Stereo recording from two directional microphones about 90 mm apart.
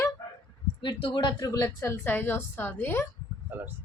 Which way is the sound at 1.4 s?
40° left (ahead or behind).